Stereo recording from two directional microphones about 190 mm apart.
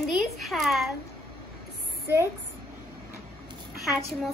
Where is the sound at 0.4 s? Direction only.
Centre (ahead or behind).